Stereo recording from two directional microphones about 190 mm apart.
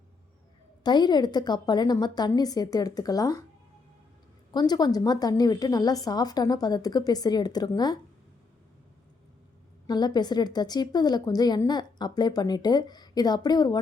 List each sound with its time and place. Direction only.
0.9 s a woman's voice: 20° left (ahead or behind)
4.5 s a woman's voice: 20° left (ahead or behind)
9.8 s a woman's voice: 20° left (ahead or behind)